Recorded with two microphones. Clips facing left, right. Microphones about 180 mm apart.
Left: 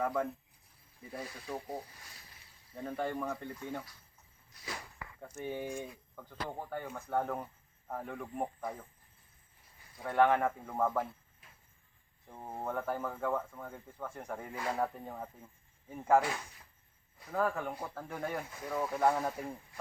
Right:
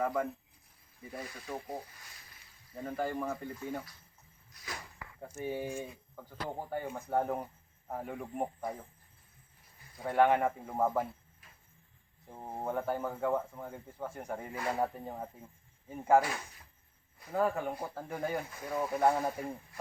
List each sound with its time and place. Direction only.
0.0 s speech: 5° right (ahead or behind)
2.7 s speech: 5° right (ahead or behind)
5.2 s speech: 10° right (ahead or behind)
10.1 s speech: 5° right (ahead or behind)
12.3 s speech: 15° right (ahead or behind)
17.3 s speech: 15° right (ahead or behind)